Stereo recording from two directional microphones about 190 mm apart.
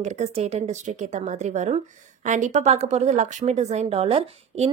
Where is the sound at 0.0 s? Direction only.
35° right (ahead or behind).